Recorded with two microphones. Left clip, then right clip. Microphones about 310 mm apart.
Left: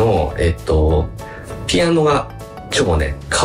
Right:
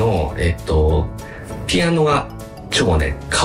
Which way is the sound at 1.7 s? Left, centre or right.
Centre.